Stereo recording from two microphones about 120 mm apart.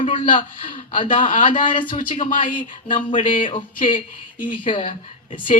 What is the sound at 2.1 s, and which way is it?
Speech, 90° left.